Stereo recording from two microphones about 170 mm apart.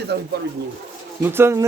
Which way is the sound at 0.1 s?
75° right (ahead or behind).